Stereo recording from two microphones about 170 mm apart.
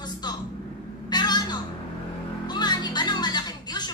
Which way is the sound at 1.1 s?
25° left (ahead or behind).